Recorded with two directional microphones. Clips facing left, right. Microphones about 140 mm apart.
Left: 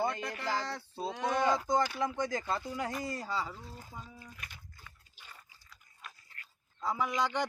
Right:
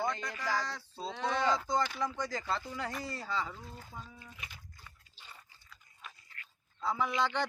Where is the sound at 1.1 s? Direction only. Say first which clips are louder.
Left 1 dB; 10° left (ahead or behind).